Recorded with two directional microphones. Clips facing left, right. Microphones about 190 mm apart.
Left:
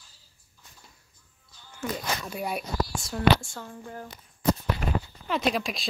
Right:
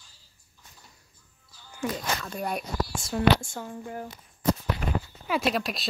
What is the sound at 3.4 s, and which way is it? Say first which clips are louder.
Speech: right 4 dB; 15° right (ahead or behind).